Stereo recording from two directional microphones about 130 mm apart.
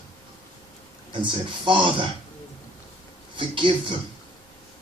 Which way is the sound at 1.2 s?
40° right (ahead or behind).